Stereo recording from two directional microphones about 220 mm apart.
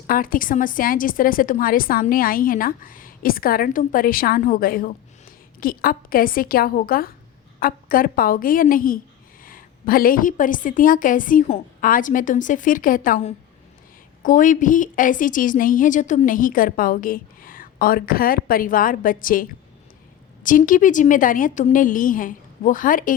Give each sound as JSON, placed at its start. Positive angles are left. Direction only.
{"t": 0.1, "sound": "a woman's voice", "side_deg": 40}